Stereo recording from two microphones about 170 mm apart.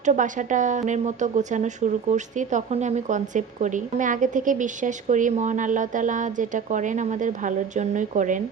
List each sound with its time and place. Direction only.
0.0 s a woman's voice: 45° right (ahead or behind)